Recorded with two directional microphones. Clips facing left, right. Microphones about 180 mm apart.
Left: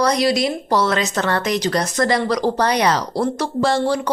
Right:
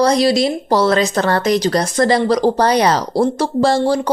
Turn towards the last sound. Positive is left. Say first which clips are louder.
# right 4 dB
turn(degrees=-35)  # may be behind; listen again after turning